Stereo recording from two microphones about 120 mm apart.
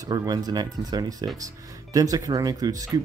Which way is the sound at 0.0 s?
30° right (ahead or behind).